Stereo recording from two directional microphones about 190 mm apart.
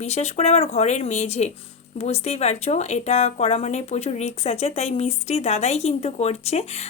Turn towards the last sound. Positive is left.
turn(degrees=35)  # may be behind; listen again after turning